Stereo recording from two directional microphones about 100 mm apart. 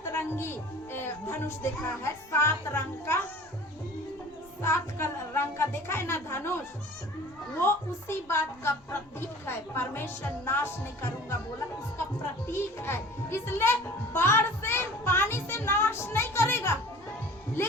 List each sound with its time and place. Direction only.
0.0 s speech: 25° left (ahead or behind)
4.6 s a woman's voice: 25° left (ahead or behind)
12.5 s a child's voice: 25° left (ahead or behind)